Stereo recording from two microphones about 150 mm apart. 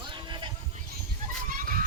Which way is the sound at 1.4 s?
65° right (ahead or behind).